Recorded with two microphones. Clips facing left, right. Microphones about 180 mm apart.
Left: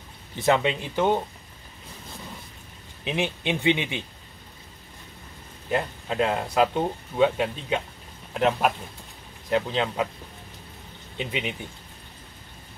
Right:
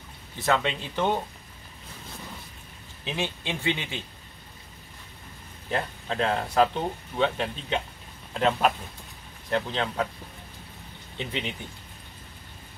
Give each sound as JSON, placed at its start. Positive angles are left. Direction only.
{"t": 0.4, "sound": "speech", "side_deg": 15}
{"t": 3.0, "sound": "speech", "side_deg": 20}
{"t": 5.7, "sound": "speech", "side_deg": 10}
{"t": 11.1, "sound": "speech", "side_deg": 15}